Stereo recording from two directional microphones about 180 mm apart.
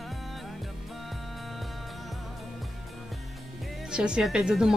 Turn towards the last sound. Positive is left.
turn(degrees=-5)  # may be behind; listen again after turning